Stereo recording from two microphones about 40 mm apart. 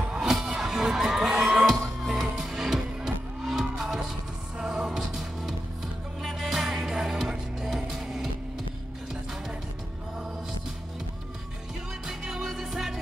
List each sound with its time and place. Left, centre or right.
0.3 s music: centre
6.2 s music: centre
12.1 s music: centre